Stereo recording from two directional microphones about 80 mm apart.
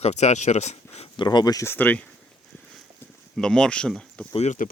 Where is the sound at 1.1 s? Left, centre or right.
Left.